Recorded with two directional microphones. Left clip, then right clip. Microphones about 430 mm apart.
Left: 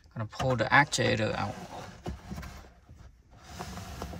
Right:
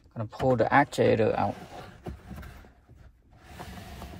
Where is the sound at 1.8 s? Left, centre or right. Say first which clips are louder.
Left 1 dB; centre.